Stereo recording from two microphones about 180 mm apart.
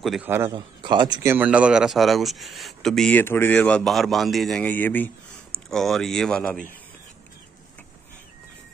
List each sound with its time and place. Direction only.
0.0 s speech: centre (ahead or behind)
0.3 s a man's voice: 15° right (ahead or behind)
0.6 s a man's voice: 25° right (ahead or behind)
1.2 s speech: 10° right (ahead or behind)